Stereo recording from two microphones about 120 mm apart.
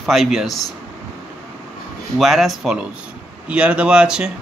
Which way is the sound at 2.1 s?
Centre (ahead or behind).